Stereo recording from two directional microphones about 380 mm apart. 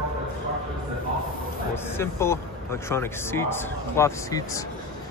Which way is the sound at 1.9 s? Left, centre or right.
Centre.